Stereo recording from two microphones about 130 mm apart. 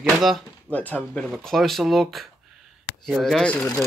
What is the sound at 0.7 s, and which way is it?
Speech, 10° left (ahead or behind).